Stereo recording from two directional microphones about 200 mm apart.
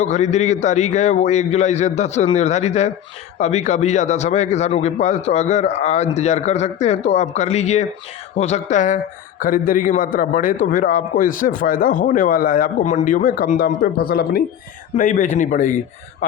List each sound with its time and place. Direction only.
0.0 s a man's voice: 35° left (ahead or behind)